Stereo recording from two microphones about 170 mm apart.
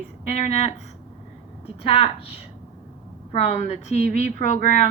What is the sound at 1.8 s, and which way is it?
A woman's voice, 35° left (ahead or behind).